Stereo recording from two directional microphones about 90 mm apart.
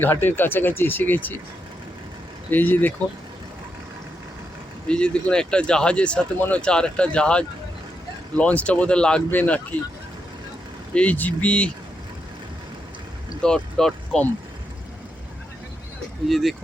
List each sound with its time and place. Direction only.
0.0 s speech: 20° left (ahead or behind)
2.5 s speech: 20° left (ahead or behind)
4.9 s speech: 10° left (ahead or behind)
10.9 s speech: 15° left (ahead or behind)
13.4 s speech: 5° left (ahead or behind)
16.3 s speech: centre (ahead or behind)